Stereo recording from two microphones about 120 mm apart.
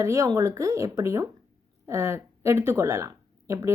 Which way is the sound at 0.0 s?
25° right (ahead or behind).